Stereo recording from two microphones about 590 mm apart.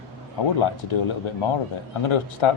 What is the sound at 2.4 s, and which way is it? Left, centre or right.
Speech, left.